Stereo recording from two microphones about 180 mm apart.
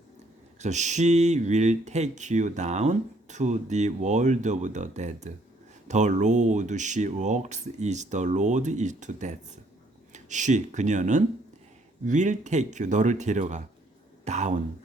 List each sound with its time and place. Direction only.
0.6 s speech: 40° right (ahead or behind)